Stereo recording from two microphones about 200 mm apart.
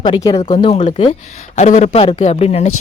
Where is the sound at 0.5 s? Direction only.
35° left (ahead or behind).